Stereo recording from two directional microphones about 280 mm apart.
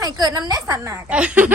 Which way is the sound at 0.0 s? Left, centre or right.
Centre.